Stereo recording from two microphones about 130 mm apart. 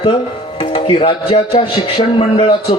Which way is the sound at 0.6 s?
40° left (ahead or behind).